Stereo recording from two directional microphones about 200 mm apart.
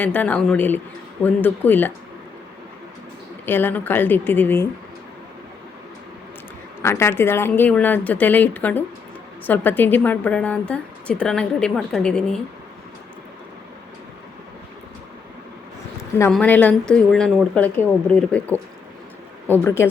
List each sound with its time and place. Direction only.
0.0 s a woman's voice: 10° left (ahead or behind)
3.4 s a woman's voice: 10° left (ahead or behind)
6.8 s a woman's voice: 10° left (ahead or behind)
16.3 s a woman's voice: 5° left (ahead or behind)